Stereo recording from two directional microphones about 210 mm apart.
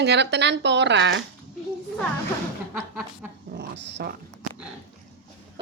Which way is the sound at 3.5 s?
50° right (ahead or behind).